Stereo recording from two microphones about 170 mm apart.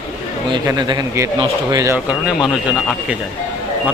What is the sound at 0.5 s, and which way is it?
Speech, 20° right (ahead or behind).